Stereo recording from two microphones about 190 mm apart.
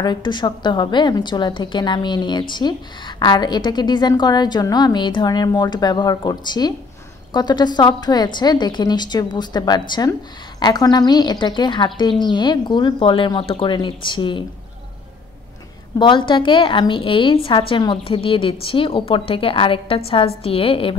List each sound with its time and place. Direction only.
0.0 s a woman's voice: 25° left (ahead or behind)
16.0 s a woman's voice: 25° left (ahead or behind)